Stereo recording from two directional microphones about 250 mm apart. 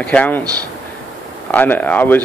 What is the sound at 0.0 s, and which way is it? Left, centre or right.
Speech, centre.